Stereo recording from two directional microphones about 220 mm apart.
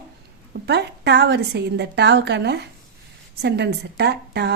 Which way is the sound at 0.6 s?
50° right (ahead or behind).